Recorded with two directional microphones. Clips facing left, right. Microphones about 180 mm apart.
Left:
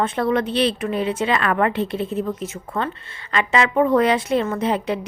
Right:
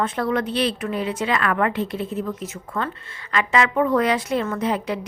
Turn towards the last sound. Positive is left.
turn(degrees=25)  # may be behind; listen again after turning